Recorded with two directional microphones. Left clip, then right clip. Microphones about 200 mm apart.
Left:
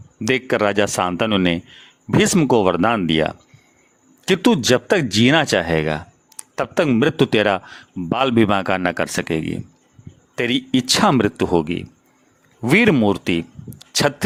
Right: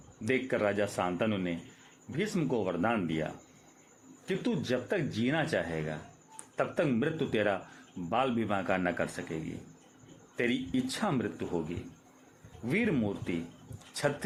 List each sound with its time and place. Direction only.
0.3 s speech: 50° left (ahead or behind)
12.6 s speech: 50° left (ahead or behind)